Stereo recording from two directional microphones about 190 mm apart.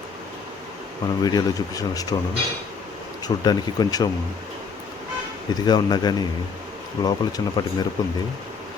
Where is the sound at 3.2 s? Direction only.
20° left (ahead or behind).